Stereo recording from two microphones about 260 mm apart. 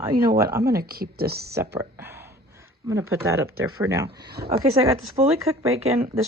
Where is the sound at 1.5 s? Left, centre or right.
Centre.